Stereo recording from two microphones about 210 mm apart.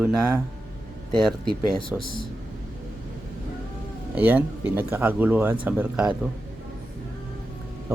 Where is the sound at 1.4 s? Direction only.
25° left (ahead or behind).